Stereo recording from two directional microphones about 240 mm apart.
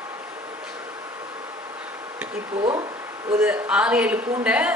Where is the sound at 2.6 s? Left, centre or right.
Centre.